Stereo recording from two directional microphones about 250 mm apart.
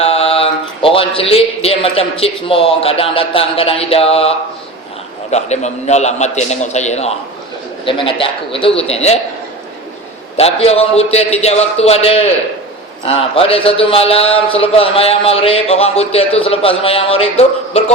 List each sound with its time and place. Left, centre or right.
0.0 s a man's voice: left
10.3 s a man's voice: left